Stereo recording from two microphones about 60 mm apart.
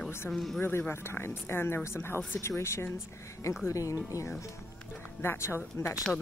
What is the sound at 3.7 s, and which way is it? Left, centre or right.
Speech, left.